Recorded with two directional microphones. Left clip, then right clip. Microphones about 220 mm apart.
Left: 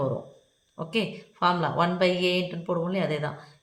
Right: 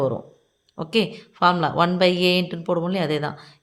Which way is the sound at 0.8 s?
50° right (ahead or behind).